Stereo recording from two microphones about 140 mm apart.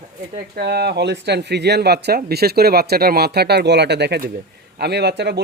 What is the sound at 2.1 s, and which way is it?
Speech, 90° right.